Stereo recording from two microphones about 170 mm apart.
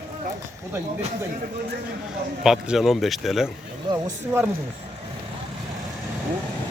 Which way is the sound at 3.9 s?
25° right (ahead or behind).